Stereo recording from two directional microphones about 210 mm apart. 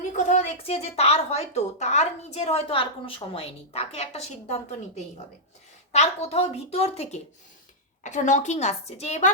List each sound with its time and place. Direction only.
0.2 s a woman's voice: 35° left (ahead or behind)